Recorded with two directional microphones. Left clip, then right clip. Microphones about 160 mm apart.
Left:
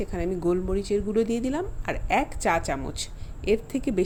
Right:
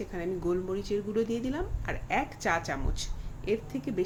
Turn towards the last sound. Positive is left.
turn(degrees=55)  # may be behind; listen again after turning